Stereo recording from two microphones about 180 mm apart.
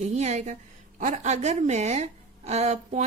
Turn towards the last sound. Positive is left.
turn(degrees=-40)  # may be behind; listen again after turning